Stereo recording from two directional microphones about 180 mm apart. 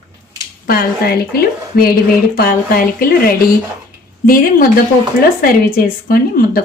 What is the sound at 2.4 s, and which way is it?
Speech, 55° left (ahead or behind).